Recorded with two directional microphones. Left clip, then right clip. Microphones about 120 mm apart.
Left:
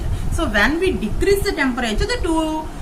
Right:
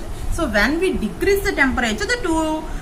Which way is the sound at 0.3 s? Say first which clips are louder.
Left 1 dB; 10° right (ahead or behind).